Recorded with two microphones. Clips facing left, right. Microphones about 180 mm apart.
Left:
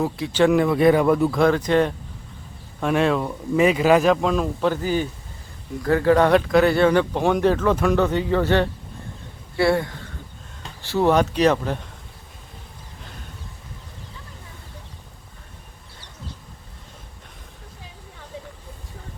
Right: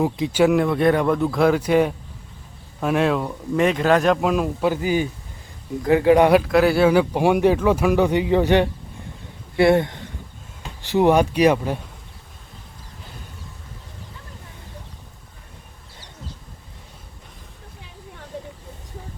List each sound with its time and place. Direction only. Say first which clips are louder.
0.0 s speech: right 2 dB; 15° right (ahead or behind)
0.4 s speech: left 1 dB; centre (ahead or behind)
6.4 s speech: even; 5° right (ahead or behind)